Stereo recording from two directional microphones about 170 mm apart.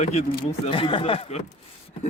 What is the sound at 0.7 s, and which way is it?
Speech, 30° left (ahead or behind).